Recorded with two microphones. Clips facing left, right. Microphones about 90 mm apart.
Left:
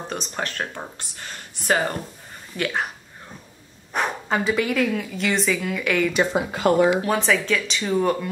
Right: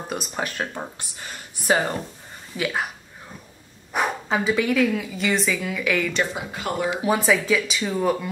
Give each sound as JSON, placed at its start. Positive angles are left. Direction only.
{"t": 0.1, "sound": "speech", "side_deg": -5}
{"t": 3.9, "sound": "speech", "side_deg": -5}
{"t": 6.3, "sound": "speech", "side_deg": 55}
{"t": 7.0, "sound": "speech", "side_deg": -10}